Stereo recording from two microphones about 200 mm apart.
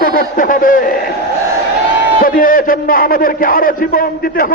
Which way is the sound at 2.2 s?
45° left (ahead or behind).